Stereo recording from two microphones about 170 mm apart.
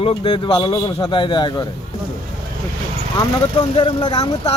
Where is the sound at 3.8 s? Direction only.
30° left (ahead or behind).